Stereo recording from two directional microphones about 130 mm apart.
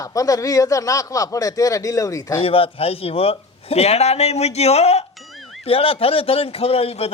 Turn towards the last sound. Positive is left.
turn(degrees=50)  # may be behind; listen again after turning